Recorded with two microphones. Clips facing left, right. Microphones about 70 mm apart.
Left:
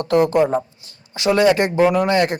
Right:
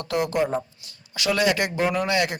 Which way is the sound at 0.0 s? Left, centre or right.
Left.